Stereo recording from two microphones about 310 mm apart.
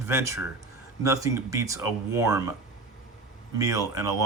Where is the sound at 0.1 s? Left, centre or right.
Centre.